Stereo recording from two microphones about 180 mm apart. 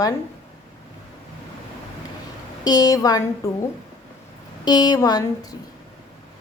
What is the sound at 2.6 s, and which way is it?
A woman's voice, 20° left (ahead or behind).